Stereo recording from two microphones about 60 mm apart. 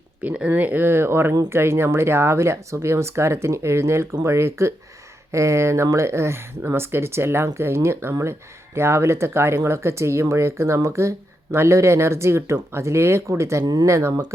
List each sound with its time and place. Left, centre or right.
0.5 s speech: right